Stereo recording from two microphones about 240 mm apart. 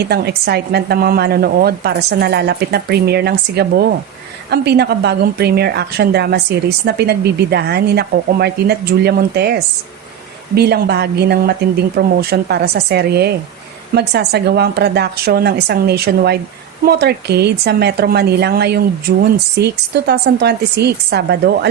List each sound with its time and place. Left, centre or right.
0.0 s a woman's voice: right